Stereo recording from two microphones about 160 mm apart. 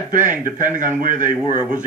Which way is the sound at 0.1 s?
55° right (ahead or behind).